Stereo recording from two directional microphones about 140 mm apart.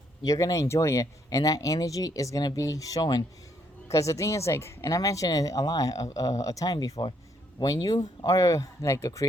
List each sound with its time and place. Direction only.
0.3 s a woman's voice: 25° left (ahead or behind)